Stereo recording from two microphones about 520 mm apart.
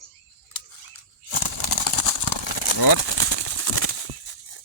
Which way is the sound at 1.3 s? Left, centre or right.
Left.